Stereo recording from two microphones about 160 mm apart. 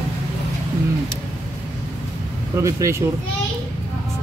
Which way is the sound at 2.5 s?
20° right (ahead or behind).